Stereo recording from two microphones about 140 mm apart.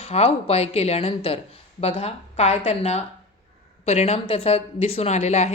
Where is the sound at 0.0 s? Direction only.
45° left (ahead or behind).